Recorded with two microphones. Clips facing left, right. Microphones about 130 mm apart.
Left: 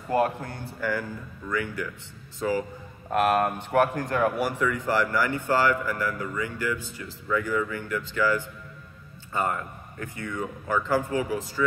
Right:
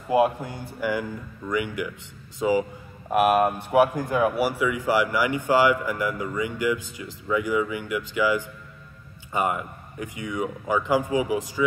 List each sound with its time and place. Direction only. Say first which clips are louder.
0.1 s speech: right 4 dB; 10° right (ahead or behind)